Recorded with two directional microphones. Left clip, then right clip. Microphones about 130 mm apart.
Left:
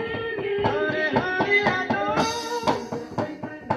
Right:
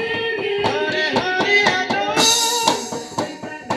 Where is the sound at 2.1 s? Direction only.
20° left (ahead or behind).